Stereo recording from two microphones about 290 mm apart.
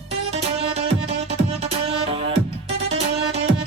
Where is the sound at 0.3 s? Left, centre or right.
Right.